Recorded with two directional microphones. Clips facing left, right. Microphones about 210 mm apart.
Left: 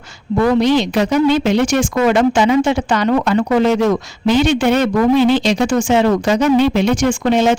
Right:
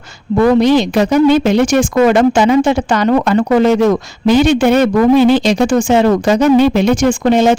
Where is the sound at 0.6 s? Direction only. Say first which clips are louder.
Right 3 dB; 45° right (ahead or behind).